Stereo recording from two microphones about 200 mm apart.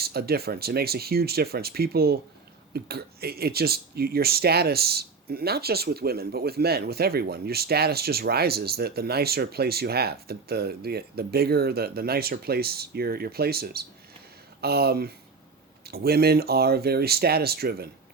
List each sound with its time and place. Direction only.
0.0 s speech: 50° right (ahead or behind)